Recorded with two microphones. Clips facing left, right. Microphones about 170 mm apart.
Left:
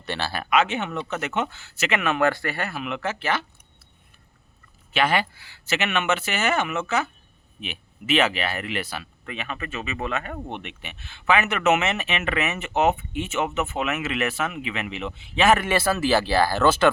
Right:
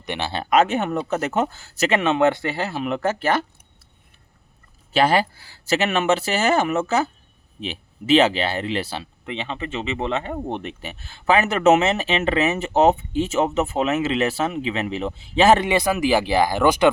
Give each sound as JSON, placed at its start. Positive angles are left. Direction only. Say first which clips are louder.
{"t": 0.0, "sound": "speech", "louder": "right 2 dB", "side_deg": -20}
{"t": 0.5, "sound": "speech", "louder": "right 5 dB", "side_deg": -45}
{"t": 2.8, "sound": "speech", "louder": "right 7 dB", "side_deg": -40}
{"t": 4.9, "sound": "speech", "louder": "right 5 dB", "side_deg": -35}
{"t": 15.6, "sound": "speech", "louder": "right 2 dB", "side_deg": -15}